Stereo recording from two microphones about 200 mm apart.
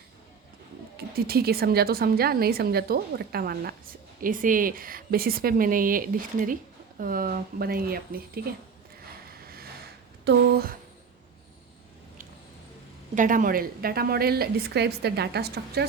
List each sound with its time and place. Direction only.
0.9 s a woman's voice: 50° right (ahead or behind)
10.2 s a woman's voice: 50° right (ahead or behind)
13.1 s a woman's voice: 40° right (ahead or behind)